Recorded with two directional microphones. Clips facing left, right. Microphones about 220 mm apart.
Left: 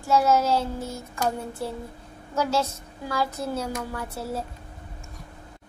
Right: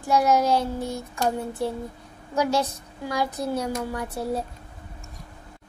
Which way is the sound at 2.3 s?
15° right (ahead or behind).